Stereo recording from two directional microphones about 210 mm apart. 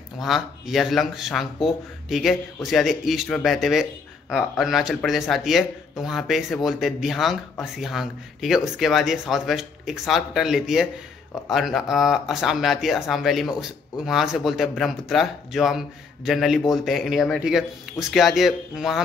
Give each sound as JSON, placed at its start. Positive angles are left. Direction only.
{"t": 0.2, "sound": "speech", "side_deg": 0}